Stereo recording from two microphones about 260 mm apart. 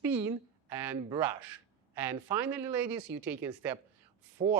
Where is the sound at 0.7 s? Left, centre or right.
Centre.